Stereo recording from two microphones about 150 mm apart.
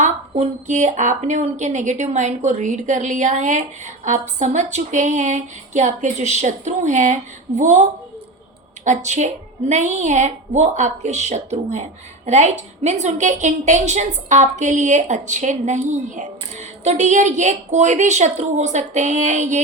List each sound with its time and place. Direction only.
0.0 s a woman's voice: 50° right (ahead or behind)